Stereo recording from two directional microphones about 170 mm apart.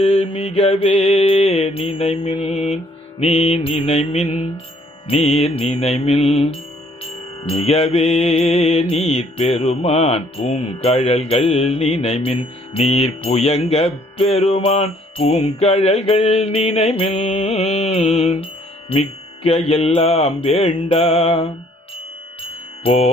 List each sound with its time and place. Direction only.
0.0 s mantra: 35° left (ahead or behind)